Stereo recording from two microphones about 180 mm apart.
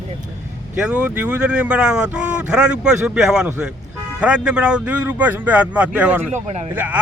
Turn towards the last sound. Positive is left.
turn(degrees=-10)  # may be behind; listen again after turning